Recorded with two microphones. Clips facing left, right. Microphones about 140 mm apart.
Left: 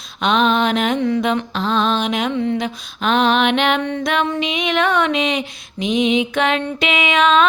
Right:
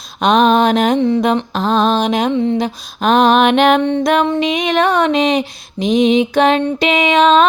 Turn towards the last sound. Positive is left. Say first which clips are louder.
# right 4 dB
turn(degrees=-35)  # may be behind; listen again after turning